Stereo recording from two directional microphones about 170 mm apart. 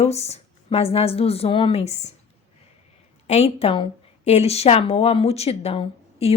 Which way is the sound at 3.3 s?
40° left (ahead or behind).